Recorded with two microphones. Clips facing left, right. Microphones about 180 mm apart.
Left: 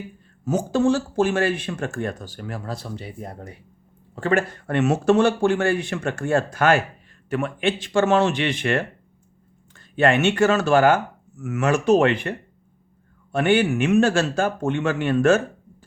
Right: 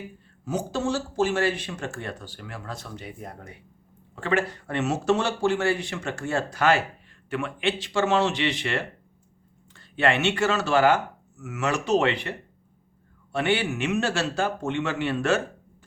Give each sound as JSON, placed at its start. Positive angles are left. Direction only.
{"t": 0.4, "sound": "speech", "side_deg": 50}
{"t": 13.3, "sound": "speech", "side_deg": 50}